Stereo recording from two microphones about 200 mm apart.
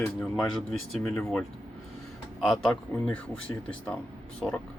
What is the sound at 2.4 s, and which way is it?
Speech, 5° left (ahead or behind).